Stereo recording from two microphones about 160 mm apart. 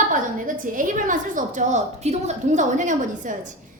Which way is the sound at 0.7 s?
55° right (ahead or behind).